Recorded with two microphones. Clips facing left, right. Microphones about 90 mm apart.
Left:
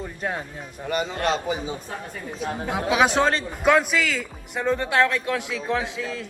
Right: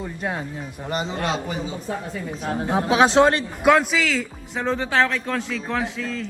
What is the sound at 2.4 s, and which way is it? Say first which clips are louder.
Speech: right 3 dB; 35° right (ahead or behind).